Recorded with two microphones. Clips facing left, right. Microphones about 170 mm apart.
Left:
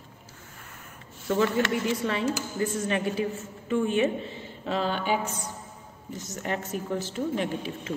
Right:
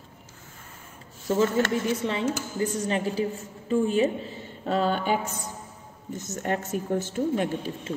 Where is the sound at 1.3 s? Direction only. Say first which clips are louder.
Right 2 dB; 30° right (ahead or behind); by 7.5 s 50° right (ahead or behind).